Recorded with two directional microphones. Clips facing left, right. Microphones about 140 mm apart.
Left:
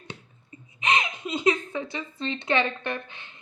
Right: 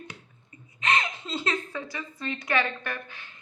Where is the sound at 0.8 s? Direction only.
20° left (ahead or behind).